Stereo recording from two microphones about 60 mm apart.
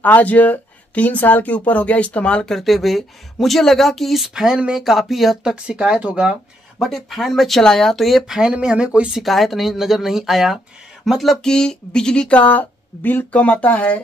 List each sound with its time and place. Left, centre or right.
0.0 s speech: left
2.4 s a woman's voice: centre
5.4 s speech: centre
6.8 s a woman's voice: centre
8.3 s speech: centre
9.2 s a woman's voice: centre
11.4 s speech: centre